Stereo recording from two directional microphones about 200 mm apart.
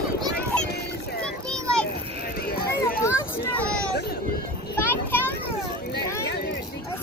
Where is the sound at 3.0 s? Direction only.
10° left (ahead or behind).